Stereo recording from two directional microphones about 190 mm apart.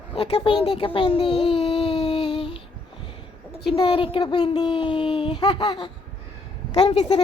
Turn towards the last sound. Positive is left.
turn(degrees=30)  # may be behind; listen again after turning